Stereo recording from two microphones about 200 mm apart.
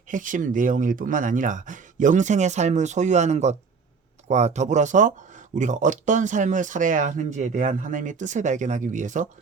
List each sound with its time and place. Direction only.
0.1 s speech: 40° right (ahead or behind)